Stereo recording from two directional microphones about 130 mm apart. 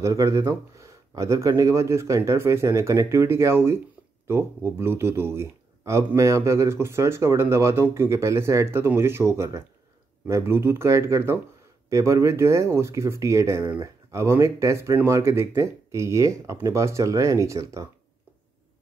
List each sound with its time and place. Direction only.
0.0 s speech: 25° right (ahead or behind)